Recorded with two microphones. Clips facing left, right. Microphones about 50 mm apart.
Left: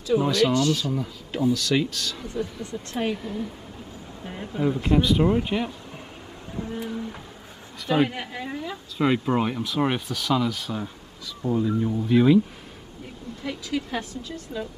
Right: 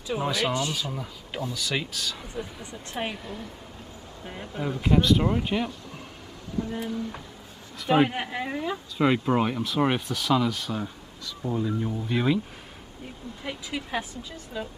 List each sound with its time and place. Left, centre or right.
0.1 s speech: centre
0.9 s speech: centre
2.3 s speech: centre
3.2 s speech: centre
6.6 s speech: left
8.1 s speech: centre
8.9 s speech: centre
13.4 s speech: centre